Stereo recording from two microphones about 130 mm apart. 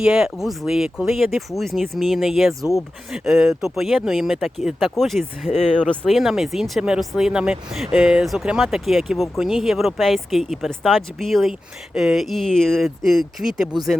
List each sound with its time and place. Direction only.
0.0 s speech: 5° right (ahead or behind)
5.5 s speech: 60° left (ahead or behind)
5.8 s speech: 10° left (ahead or behind)
6.1 s speech: 5° right (ahead or behind)